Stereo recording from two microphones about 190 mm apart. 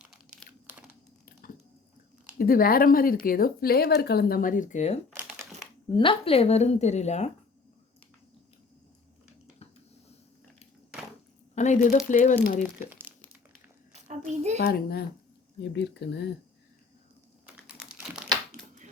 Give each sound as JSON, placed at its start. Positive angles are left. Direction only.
{"t": 0.0, "sound": "crumpling", "side_deg": -5}
{"t": 2.4, "sound": "speech", "side_deg": 50}
{"t": 6.0, "sound": "a woman's voice", "side_deg": 30}
{"t": 11.5, "sound": "a woman's voice", "side_deg": 40}
{"t": 13.9, "sound": "a sound", "side_deg": -35}
{"t": 14.6, "sound": "speech", "side_deg": 55}
{"t": 17.4, "sound": "crumpling", "side_deg": -5}